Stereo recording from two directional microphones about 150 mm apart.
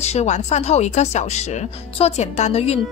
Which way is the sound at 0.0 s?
45° left (ahead or behind).